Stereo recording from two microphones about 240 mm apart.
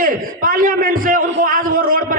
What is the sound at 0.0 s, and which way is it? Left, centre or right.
A man's voice, right.